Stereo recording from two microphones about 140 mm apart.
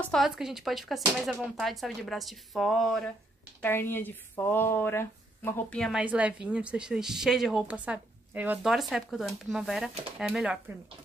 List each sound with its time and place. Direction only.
0.0 s speech: centre (ahead or behind)
3.6 s speech: 15° left (ahead or behind)
5.8 s a woman's voice: centre (ahead or behind)
8.6 s speech: centre (ahead or behind)